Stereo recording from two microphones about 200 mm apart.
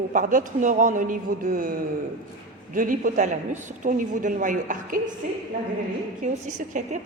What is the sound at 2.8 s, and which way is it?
A woman's voice, 40° right (ahead or behind).